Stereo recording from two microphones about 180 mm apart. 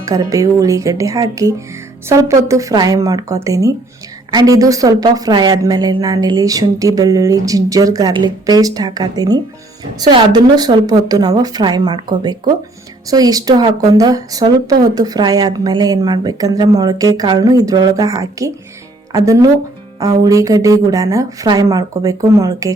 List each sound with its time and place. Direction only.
0.0 s a woman's voice: 20° right (ahead or behind)
13.1 s a woman's voice: 20° right (ahead or behind)